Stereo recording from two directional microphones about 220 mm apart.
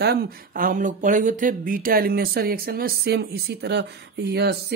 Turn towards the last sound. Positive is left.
turn(degrees=-50)  # may be behind; listen again after turning